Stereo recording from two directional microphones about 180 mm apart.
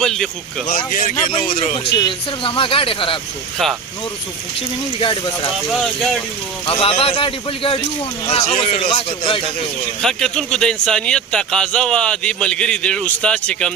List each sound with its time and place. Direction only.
0.0 s speech: 5° left (ahead or behind)
0.7 s speech: 50° left (ahead or behind)
1.5 s a man's voice: 35° left (ahead or behind)
3.6 s speech: centre (ahead or behind)
4.9 s speech: 30° left (ahead or behind)
5.7 s speech: centre (ahead or behind)
6.7 s a man's voice: 30° left (ahead or behind)
10.0 s speech: 5° left (ahead or behind)